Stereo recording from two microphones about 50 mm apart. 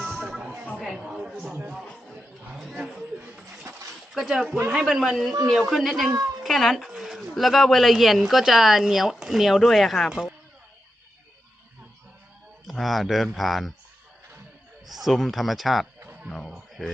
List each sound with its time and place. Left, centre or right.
0.0 s a sound: centre
1.8 s a sound: centre
2.6 s a sound: centre
4.1 s speech: centre
6.9 s pigeon: centre
7.3 s speech: centre
10.1 s speech: centre
12.6 s speech: centre
14.8 s speech: centre